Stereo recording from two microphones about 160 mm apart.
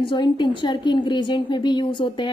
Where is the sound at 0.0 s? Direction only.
30° left (ahead or behind).